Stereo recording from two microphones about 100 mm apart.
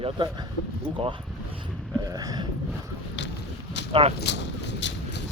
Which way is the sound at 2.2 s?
40° right (ahead or behind).